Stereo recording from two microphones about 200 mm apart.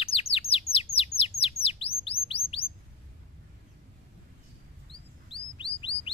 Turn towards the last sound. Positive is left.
turn(degrees=25)  # may be behind; listen again after turning